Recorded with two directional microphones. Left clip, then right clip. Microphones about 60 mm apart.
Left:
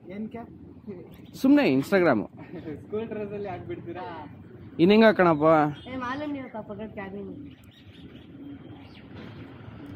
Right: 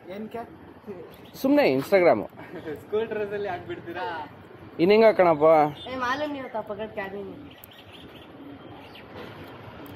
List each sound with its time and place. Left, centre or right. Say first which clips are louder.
0.1 s a woman's voice: right 3 dB; right
1.4 s speech: right 1 dB; left
2.9 s speech: right 5 dB; right
4.7 s speech: right 1 dB; left
5.9 s a woman's voice: right 5 dB; right